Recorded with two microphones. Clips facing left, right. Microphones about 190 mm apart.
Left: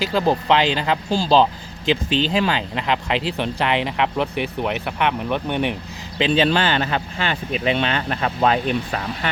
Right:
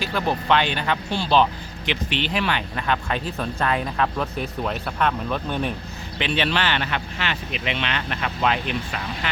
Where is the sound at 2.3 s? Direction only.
25° left (ahead or behind).